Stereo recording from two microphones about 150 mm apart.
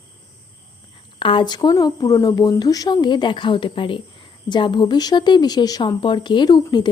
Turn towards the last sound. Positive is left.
turn(degrees=30)  # may be behind; listen again after turning